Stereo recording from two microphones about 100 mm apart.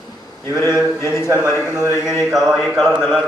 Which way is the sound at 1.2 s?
35° right (ahead or behind).